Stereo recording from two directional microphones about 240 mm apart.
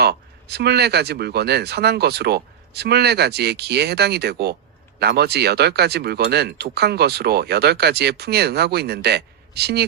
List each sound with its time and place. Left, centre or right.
0.0 s speech: right